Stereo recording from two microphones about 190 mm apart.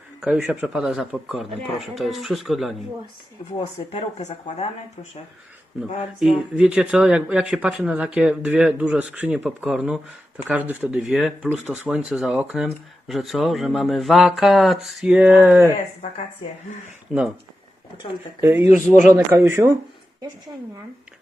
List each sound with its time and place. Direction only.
0.2 s speech: 5° right (ahead or behind)
3.5 s speech: 30° left (ahead or behind)
5.7 s speech: 5° right (ahead or behind)
17.1 s speech: centre (ahead or behind)
18.3 s speech: 15° right (ahead or behind)